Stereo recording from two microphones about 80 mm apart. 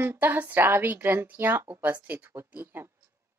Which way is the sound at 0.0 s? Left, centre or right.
Right.